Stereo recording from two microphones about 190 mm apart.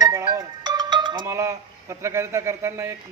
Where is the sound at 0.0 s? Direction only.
20° right (ahead or behind).